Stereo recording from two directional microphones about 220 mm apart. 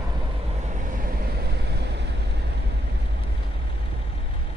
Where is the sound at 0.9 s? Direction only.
40° right (ahead or behind).